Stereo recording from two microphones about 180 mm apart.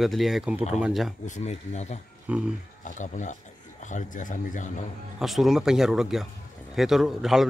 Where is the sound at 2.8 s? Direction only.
45° left (ahead or behind).